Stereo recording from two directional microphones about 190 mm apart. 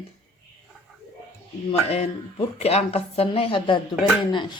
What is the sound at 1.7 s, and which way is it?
A woman's voice, 35° left (ahead or behind).